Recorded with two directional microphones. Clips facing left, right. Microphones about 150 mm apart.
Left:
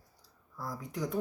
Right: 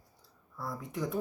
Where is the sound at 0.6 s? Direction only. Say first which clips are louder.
Right 1 dB; centre (ahead or behind).